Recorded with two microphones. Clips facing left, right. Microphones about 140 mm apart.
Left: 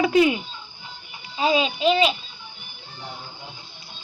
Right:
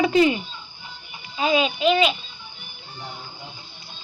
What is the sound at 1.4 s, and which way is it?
Speech, 30° left (ahead or behind).